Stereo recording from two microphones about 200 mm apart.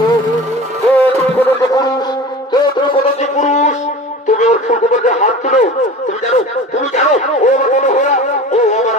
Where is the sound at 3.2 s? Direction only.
35° left (ahead or behind).